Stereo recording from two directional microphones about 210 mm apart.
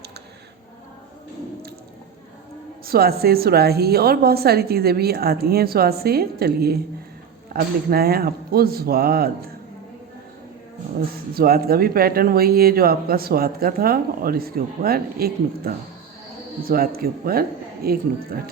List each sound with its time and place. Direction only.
2.8 s speech: 45° right (ahead or behind)
11.3 s speech: 45° right (ahead or behind)